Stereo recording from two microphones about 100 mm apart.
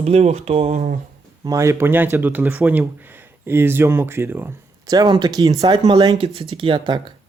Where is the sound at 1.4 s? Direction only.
35° right (ahead or behind).